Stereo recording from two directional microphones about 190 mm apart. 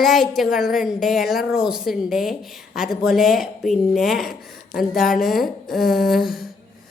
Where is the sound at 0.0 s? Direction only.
Centre (ahead or behind).